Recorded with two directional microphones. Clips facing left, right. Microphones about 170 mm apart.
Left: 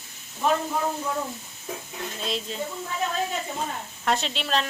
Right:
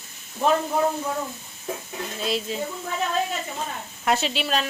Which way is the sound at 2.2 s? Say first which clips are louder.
Right 5 dB; 5° right (ahead or behind).